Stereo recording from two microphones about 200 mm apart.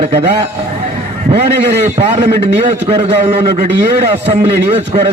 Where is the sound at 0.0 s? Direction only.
30° right (ahead or behind).